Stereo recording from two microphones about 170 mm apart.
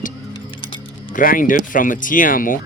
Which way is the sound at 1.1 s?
55° left (ahead or behind).